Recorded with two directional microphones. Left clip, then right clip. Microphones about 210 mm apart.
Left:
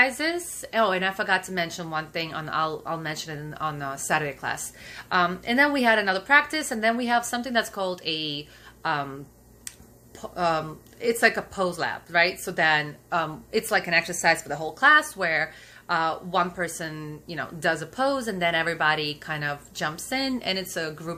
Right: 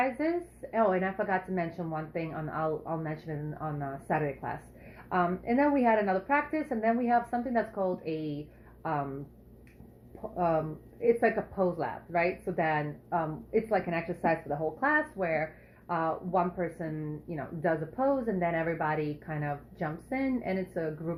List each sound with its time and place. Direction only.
0.7 s speech: 35° left (ahead or behind)
10.3 s speech: 35° left (ahead or behind)